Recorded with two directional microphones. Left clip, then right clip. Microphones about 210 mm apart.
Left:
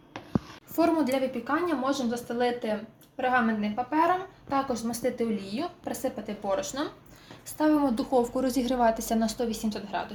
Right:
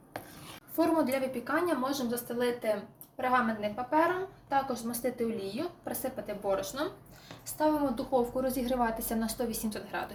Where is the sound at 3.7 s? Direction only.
50° left (ahead or behind).